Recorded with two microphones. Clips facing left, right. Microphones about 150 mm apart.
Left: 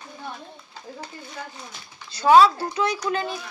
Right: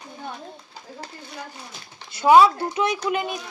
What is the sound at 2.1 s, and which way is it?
A child's voice, 20° right (ahead or behind).